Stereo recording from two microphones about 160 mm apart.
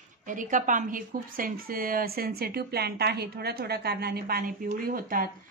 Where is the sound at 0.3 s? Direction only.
55° right (ahead or behind); by 4.5 s 75° right (ahead or behind).